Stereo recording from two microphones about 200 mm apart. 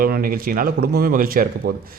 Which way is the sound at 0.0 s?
45° right (ahead or behind).